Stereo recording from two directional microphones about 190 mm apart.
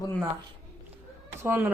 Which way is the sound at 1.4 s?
10° right (ahead or behind).